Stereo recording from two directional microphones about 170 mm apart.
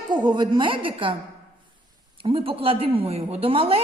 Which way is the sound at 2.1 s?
30° right (ahead or behind).